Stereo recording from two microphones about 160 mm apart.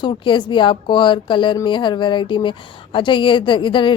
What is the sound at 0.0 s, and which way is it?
Speech, 30° left (ahead or behind).